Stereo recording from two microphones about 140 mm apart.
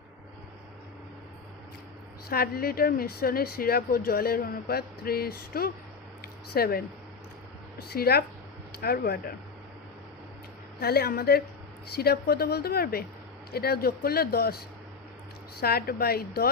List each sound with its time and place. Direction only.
2.3 s a woman's voice: 90° left
6.2 s a sound: 90° left
7.8 s a woman's voice: 90° left
10.8 s a woman's voice: 90° left
15.6 s a woman's voice: 90° left